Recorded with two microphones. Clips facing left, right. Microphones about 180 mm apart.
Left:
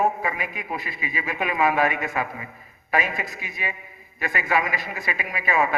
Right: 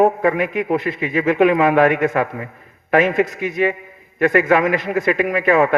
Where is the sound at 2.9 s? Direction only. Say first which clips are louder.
Right 11 dB; 70° right (ahead or behind).